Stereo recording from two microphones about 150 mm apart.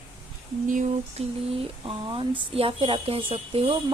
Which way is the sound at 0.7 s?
60° right (ahead or behind).